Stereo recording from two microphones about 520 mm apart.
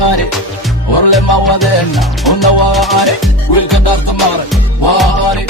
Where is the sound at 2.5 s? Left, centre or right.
Left.